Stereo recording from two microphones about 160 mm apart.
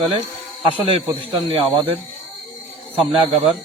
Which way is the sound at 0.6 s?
35° right (ahead or behind).